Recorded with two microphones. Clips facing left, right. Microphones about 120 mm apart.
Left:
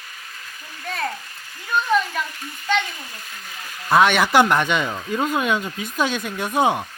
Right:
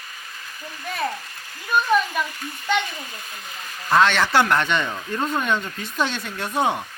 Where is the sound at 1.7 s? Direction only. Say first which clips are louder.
Right 1 dB; 10° right (ahead or behind).